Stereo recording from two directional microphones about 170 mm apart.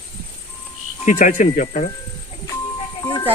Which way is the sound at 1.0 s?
50° left (ahead or behind).